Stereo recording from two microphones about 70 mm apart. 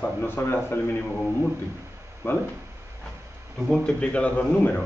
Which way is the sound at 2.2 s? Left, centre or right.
Left.